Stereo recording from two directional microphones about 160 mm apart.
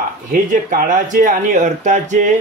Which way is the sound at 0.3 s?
60° right (ahead or behind).